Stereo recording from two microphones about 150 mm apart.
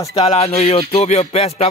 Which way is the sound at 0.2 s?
45° left (ahead or behind).